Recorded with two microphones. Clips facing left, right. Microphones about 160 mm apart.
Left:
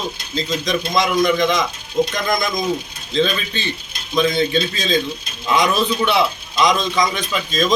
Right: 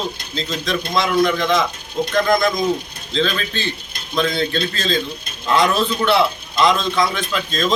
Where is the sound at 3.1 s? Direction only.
10° left (ahead or behind).